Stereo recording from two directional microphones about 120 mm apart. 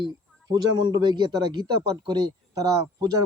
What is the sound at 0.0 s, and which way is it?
A man's voice, 35° right (ahead or behind).